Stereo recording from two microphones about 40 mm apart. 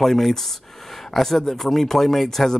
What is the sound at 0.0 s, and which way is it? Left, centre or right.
Speech, centre.